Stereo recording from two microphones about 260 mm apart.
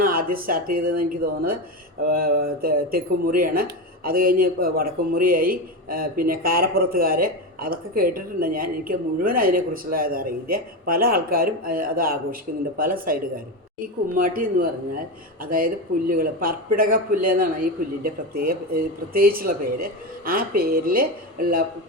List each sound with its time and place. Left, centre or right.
0.0 s speech: right